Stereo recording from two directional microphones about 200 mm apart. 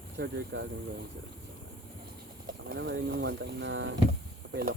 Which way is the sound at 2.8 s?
55° right (ahead or behind).